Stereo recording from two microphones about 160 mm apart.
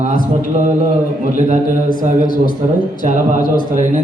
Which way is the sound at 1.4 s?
55° right (ahead or behind).